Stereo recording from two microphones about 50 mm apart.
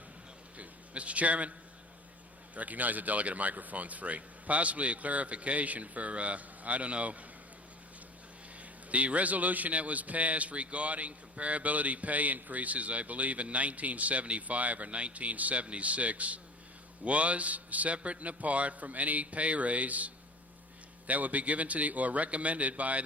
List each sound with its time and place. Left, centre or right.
0.5 s a sound: right
2.6 s a man's voice: right
8.5 s a man's voice: right